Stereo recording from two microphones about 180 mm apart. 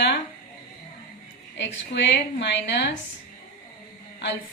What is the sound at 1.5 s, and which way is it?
A woman's voice, 75° left (ahead or behind).